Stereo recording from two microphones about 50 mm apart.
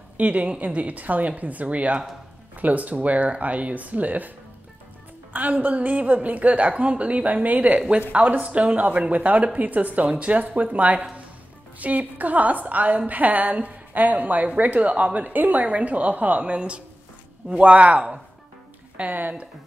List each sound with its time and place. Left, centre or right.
0.2 s a woman's voice: right
5.3 s a woman's voice: right